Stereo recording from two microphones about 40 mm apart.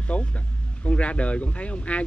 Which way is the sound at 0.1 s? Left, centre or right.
Left.